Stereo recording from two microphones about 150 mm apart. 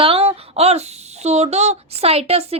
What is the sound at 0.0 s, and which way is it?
Speech, 40° right (ahead or behind).